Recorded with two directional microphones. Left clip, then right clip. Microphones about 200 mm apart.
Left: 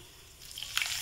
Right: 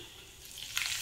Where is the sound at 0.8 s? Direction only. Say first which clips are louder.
Left 2 dB; centre (ahead or behind).